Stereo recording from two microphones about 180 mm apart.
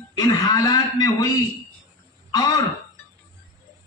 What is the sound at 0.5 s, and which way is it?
Speech, 20° left (ahead or behind).